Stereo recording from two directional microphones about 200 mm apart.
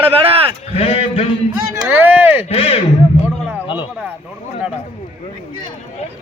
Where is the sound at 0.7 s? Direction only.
30° left (ahead or behind).